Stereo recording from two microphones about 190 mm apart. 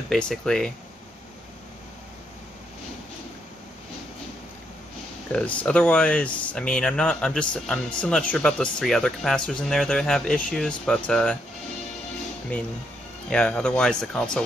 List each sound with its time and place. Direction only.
0.1 s speech: 5° left (ahead or behind)
5.3 s speech: 5° left (ahead or behind)
13.3 s speech: 5° left (ahead or behind)